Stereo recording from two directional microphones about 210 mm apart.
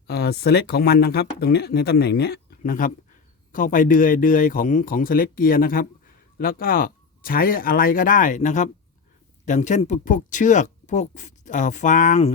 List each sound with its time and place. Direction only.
0.1 s speech: 50° left (ahead or behind); by 12.3 s 35° left (ahead or behind)